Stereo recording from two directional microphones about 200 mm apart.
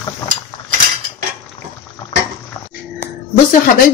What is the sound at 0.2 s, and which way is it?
Cutlery, 25° left (ahead or behind).